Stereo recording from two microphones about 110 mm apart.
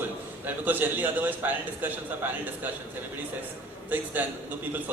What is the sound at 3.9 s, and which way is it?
Speech, 15° right (ahead or behind).